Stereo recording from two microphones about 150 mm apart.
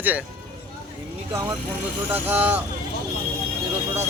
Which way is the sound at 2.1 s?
15° right (ahead or behind).